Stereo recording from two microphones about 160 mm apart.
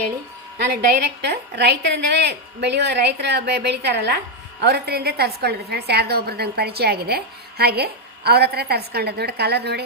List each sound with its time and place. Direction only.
0.6 s a woman's voice: 85° right